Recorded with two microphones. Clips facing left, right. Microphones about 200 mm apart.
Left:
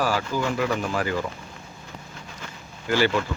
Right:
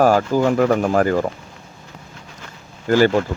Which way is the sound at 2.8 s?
45° right (ahead or behind).